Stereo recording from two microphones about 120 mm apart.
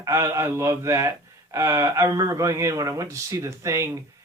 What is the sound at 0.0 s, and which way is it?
Speech, 25° right (ahead or behind).